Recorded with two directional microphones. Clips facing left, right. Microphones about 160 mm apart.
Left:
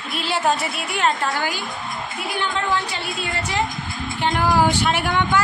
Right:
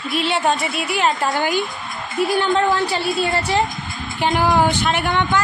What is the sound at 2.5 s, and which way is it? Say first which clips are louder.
A woman's voice: right 6 dB; 40° right (ahead or behind).